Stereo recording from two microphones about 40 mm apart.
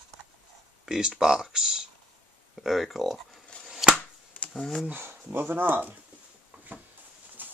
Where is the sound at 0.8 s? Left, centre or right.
Centre.